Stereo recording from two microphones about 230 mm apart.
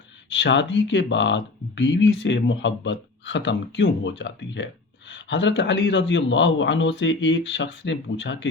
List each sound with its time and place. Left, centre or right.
0.3 s speech: left